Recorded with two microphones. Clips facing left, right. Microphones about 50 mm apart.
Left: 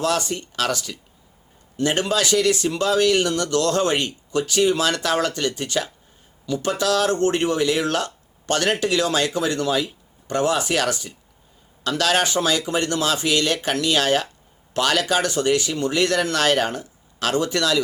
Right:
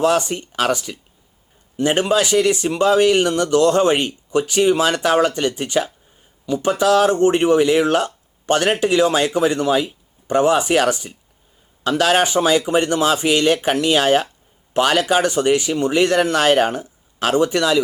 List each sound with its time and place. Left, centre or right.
0.0 s speech: right